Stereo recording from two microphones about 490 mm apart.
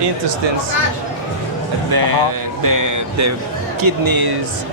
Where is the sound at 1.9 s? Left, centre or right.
Right.